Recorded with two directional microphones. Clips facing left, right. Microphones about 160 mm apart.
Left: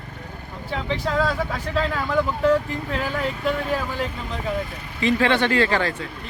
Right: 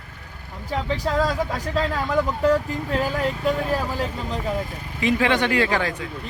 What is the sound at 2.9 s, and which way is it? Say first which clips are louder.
Speech: right 3 dB; 40° right (ahead or behind).